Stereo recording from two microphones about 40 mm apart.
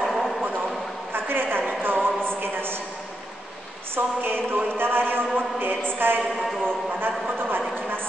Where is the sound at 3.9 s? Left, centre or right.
Right.